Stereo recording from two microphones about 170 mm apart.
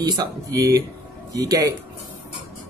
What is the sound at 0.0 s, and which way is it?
Speech, 20° right (ahead or behind).